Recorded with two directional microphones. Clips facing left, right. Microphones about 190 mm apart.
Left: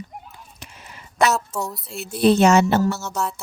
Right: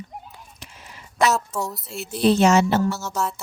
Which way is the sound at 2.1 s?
55° left (ahead or behind).